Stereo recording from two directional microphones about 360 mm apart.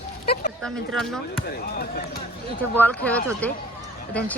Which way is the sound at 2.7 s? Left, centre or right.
Centre.